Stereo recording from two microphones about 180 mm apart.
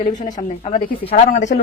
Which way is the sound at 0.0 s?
45° left (ahead or behind).